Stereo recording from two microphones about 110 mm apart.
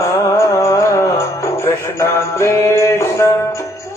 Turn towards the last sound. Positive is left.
turn(degrees=25)  # may be behind; listen again after turning